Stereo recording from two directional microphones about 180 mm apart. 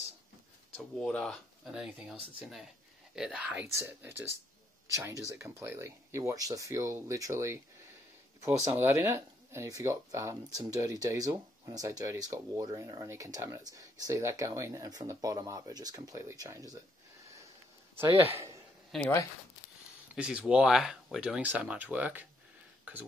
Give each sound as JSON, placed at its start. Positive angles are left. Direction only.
{"t": 0.9, "sound": "speech", "side_deg": 5}
{"t": 3.2, "sound": "speech", "side_deg": -5}
{"t": 8.6, "sound": "speech", "side_deg": -15}
{"t": 17.9, "sound": "speech", "side_deg": -10}
{"t": 18.9, "sound": "speech", "side_deg": 5}
{"t": 20.2, "sound": "speech", "side_deg": -5}